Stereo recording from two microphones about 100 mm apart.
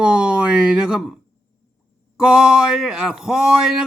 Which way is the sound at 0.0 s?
10° right (ahead or behind).